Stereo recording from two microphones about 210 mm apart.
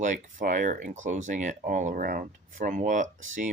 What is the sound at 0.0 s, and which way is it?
Speech, 35° right (ahead or behind).